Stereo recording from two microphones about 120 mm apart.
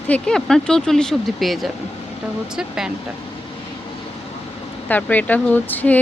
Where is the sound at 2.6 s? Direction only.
5° right (ahead or behind).